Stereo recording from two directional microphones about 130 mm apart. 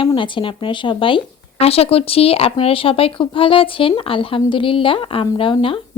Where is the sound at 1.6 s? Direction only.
50° left (ahead or behind).